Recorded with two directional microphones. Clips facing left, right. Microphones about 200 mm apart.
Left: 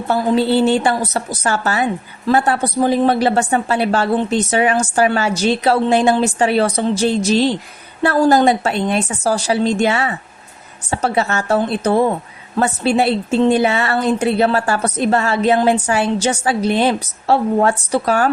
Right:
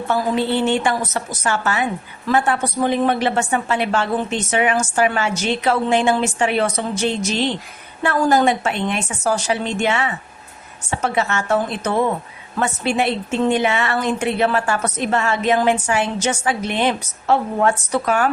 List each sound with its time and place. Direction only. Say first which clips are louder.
0.1 s a woman's voice: left 4 dB; 35° left (ahead or behind)